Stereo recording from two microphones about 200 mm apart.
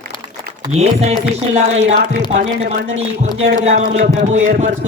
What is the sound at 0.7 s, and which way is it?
Speech, 35° right (ahead or behind).